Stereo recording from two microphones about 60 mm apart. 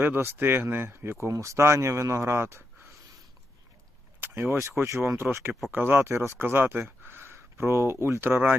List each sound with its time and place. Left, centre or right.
0.0 s speech: right
1.3 s speech: right
4.2 s vehicle: right
4.6 s speech: right
5.7 s speech: right
7.0 s a sound: right